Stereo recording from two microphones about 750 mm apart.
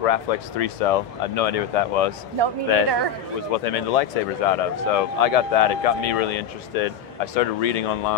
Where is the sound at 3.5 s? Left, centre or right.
Left.